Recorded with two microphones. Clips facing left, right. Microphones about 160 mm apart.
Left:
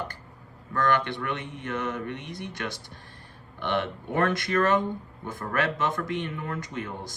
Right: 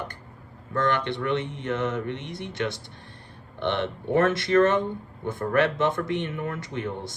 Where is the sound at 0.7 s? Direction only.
20° right (ahead or behind).